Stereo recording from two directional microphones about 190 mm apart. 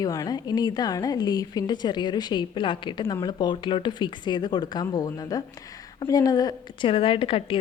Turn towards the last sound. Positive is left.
turn(degrees=30)  # may be behind; listen again after turning